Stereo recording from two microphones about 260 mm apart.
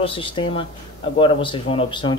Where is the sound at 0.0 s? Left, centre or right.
Centre.